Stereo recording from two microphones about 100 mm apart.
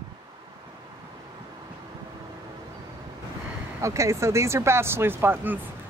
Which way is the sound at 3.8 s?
30° right (ahead or behind).